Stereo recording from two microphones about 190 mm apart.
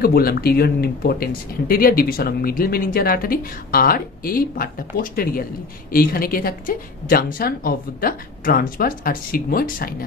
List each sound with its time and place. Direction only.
0.0 s speech: 50° left (ahead or behind)